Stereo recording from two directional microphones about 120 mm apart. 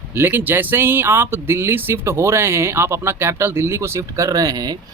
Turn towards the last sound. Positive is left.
turn(degrees=-30)  # may be behind; listen again after turning